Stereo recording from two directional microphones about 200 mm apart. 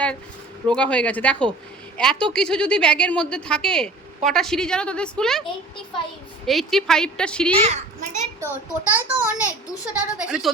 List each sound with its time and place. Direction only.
0.7 s a woman's voice: 5° left (ahead or behind)
6.4 s a woman's voice: centre (ahead or behind)
7.5 s a child's voice: 35° right (ahead or behind)
8.4 s a child's voice: 10° right (ahead or behind)